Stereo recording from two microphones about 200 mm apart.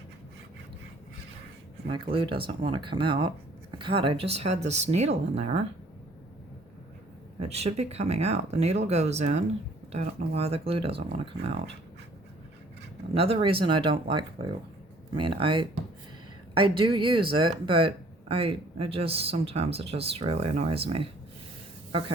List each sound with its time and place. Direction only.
1.9 s speech: 25° right (ahead or behind)
7.3 s speech: 30° right (ahead or behind)
13.1 s speech: 30° right (ahead or behind)